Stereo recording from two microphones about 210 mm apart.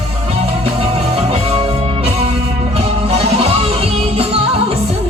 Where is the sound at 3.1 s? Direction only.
30° right (ahead or behind).